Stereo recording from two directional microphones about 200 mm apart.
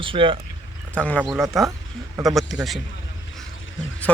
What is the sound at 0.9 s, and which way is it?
Speech, 5° left (ahead or behind).